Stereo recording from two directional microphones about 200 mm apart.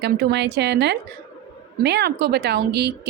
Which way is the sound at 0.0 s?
60° right (ahead or behind).